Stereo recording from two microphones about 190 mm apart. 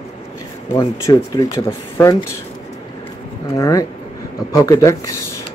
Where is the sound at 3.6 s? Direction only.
15° left (ahead or behind).